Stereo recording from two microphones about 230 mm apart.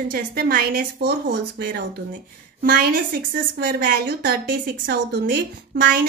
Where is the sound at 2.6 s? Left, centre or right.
Right.